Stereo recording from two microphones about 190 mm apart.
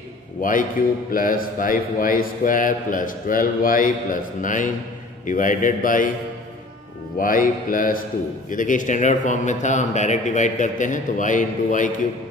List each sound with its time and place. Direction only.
0.4 s a man's voice: 45° left (ahead or behind)
7.2 s a man's voice: 45° left (ahead or behind)